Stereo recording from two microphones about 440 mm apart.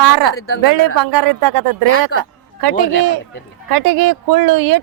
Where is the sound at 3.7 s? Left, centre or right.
Right.